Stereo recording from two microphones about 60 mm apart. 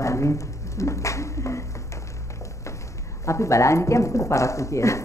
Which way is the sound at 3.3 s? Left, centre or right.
Left.